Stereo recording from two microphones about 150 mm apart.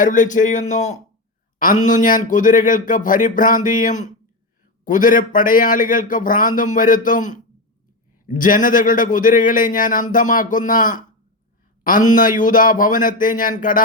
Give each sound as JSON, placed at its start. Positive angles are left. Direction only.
{"t": 0.0, "sound": "speech", "side_deg": 60}
{"t": 1.5, "sound": "speech", "side_deg": 60}